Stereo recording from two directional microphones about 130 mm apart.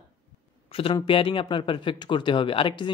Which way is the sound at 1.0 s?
40° left (ahead or behind).